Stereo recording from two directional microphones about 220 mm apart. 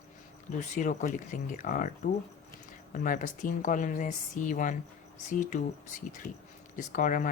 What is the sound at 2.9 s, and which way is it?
Speech, 35° left (ahead or behind).